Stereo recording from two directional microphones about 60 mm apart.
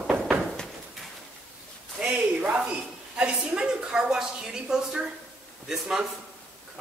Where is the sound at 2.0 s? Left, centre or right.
Centre.